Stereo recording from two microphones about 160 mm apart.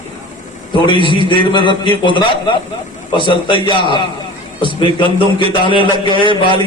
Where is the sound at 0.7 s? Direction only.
30° left (ahead or behind).